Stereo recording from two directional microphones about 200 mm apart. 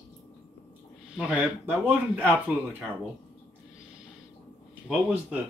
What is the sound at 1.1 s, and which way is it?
Speech, 5° right (ahead or behind).